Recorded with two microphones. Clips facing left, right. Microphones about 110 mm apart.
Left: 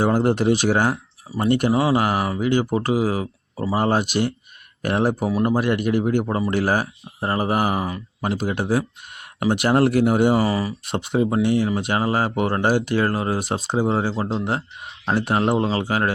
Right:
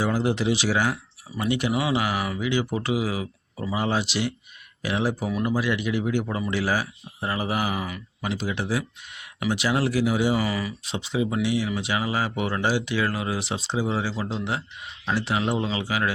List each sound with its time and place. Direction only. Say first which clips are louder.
0.0 s speech: left 5 dB; 50° left (ahead or behind)
6.2 s speech: left 6 dB; 35° left (ahead or behind)
6.5 s speech: left 3 dB; 50° left (ahead or behind); by 8.0 s 35° left (ahead or behind)
8.2 s speech: left 5 dB; 50° left (ahead or behind)
10.8 s speech: left 5 dB; 55° left (ahead or behind)